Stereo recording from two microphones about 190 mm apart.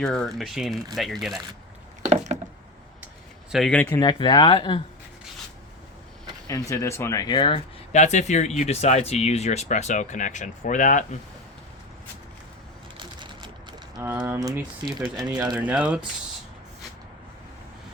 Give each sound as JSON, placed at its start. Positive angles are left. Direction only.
{"t": 0.0, "sound": "speech", "side_deg": 5}
{"t": 2.0, "sound": "a sound", "side_deg": -35}
{"t": 3.5, "sound": "speech", "side_deg": 5}
{"t": 3.8, "sound": "speech", "side_deg": 20}
{"t": 6.5, "sound": "speech", "side_deg": 15}
{"t": 13.0, "sound": "a sound", "side_deg": -25}
{"t": 14.0, "sound": "speech", "side_deg": -10}